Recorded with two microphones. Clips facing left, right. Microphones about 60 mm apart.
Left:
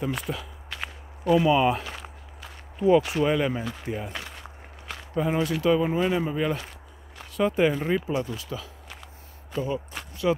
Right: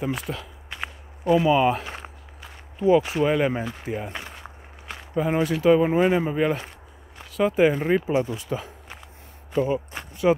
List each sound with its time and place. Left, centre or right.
0.0 s speech: centre
0.7 s whip: centre
2.4 s a sound: centre
3.2 s speech: centre
7.2 s speech: centre
7.9 s speech: right
9.7 s a sound: centre